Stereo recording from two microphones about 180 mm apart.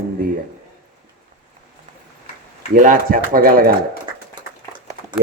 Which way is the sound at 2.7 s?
50° right (ahead or behind).